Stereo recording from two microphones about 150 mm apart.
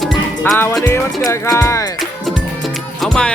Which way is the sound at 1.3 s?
20° left (ahead or behind).